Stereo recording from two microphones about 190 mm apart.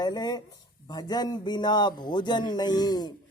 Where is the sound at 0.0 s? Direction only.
20° left (ahead or behind).